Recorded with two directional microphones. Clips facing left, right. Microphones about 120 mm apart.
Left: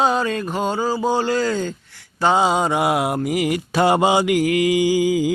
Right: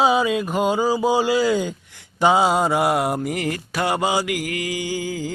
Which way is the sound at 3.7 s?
25° left (ahead or behind).